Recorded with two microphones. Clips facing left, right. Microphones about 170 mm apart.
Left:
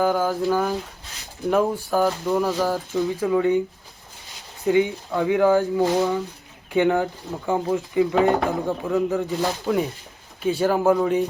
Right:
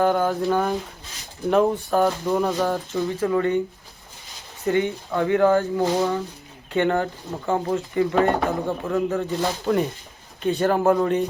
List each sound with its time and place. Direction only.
0.0 s speech: centre (ahead or behind)
4.6 s speech: 10° left (ahead or behind)